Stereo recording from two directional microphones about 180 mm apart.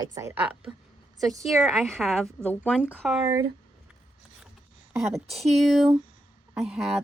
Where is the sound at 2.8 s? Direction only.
5° right (ahead or behind).